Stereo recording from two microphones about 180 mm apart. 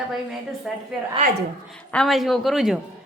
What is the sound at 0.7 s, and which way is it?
A woman's voice, centre (ahead or behind).